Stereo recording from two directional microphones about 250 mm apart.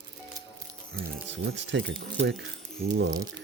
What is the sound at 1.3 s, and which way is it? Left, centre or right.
Speech, right.